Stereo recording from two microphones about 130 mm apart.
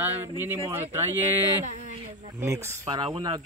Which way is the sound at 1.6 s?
65° right (ahead or behind).